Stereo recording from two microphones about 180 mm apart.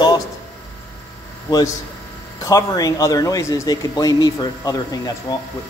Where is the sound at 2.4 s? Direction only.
20° left (ahead or behind).